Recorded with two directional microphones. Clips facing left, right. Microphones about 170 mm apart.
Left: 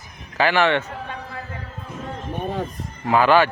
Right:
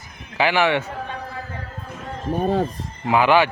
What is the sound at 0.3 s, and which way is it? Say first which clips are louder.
Speech: even; 10° right (ahead or behind).